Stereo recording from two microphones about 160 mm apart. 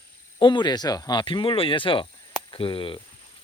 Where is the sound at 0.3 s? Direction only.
30° left (ahead or behind).